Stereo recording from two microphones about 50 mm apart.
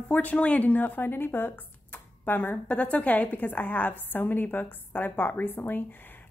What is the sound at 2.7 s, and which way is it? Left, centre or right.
A woman's voice, left.